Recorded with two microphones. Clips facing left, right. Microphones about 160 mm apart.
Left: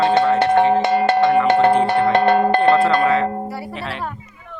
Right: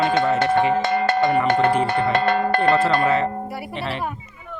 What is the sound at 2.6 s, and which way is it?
Speech, centre (ahead or behind).